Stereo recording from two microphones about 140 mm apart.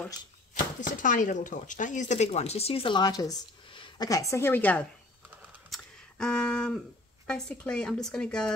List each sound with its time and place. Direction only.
0.7 s speech: 65° left (ahead or behind); by 4.1 s 30° left (ahead or behind)
4.1 s a woman's voice: 20° left (ahead or behind)
5.7 s a sound: 5° left (ahead or behind)
7.2 s speech: 5° left (ahead or behind)